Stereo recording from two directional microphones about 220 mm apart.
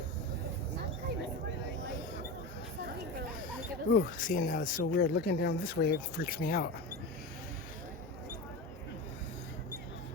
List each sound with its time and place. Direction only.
3.9 s speech: 40° left (ahead or behind)